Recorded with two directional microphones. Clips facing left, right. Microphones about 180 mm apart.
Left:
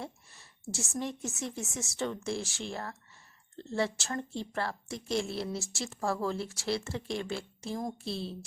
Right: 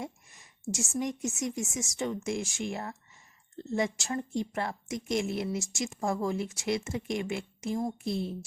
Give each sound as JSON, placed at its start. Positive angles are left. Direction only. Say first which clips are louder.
{"t": 0.7, "sound": "a woman's voice", "louder": "right 4 dB", "side_deg": -15}